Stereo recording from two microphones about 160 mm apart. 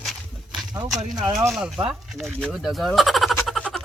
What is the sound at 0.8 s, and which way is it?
Speech, 25° right (ahead or behind).